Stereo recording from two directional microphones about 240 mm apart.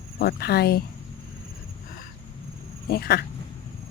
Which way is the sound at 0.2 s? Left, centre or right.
Left.